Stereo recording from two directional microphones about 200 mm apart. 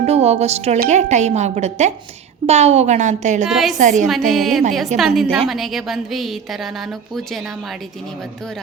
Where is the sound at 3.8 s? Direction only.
40° right (ahead or behind).